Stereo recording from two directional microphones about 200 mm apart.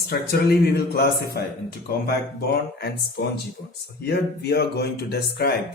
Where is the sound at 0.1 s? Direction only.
50° left (ahead or behind).